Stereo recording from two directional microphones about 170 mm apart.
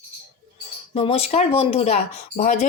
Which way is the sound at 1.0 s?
35° left (ahead or behind).